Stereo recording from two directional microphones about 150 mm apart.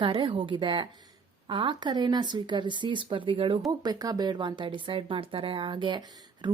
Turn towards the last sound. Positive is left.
turn(degrees=-30)  # may be behind; listen again after turning